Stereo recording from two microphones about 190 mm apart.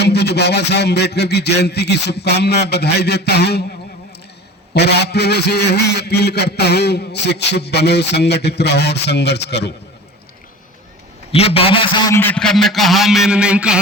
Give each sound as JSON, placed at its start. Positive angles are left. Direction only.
{"t": 0.0, "sound": "a man's voice", "side_deg": 60}
{"t": 4.7, "sound": "a man's voice", "side_deg": 60}
{"t": 11.3, "sound": "a man's voice", "side_deg": 30}